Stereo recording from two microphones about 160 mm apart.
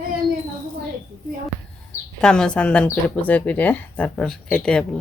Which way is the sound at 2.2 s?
5° left (ahead or behind).